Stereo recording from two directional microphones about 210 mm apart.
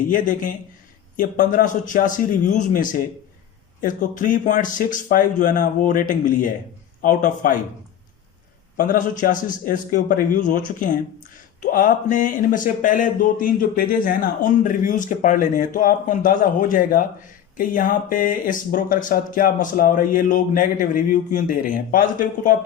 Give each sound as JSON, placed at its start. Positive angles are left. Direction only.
{"t": 0.0, "sound": "speech", "side_deg": 40}
{"t": 8.8, "sound": "speech", "side_deg": 40}